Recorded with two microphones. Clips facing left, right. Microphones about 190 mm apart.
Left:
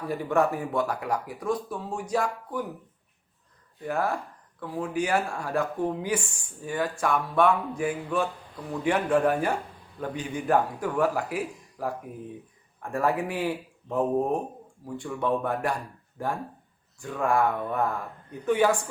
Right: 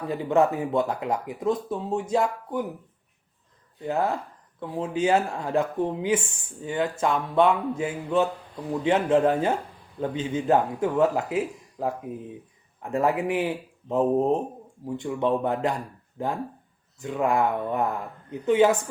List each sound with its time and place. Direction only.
0.1 s speech: 20° right (ahead or behind)
3.8 s speech: 20° right (ahead or behind)